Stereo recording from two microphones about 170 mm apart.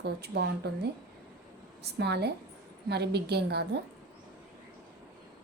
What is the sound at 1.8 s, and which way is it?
A woman's voice, 75° right (ahead or behind).